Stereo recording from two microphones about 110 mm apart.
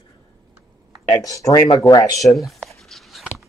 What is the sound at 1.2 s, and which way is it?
Speech, 30° left (ahead or behind).